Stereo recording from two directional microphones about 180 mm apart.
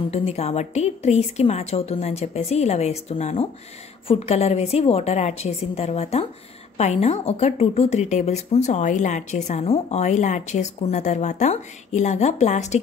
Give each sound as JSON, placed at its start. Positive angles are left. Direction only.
{"t": 0.1, "sound": "a woman's voice", "side_deg": 35}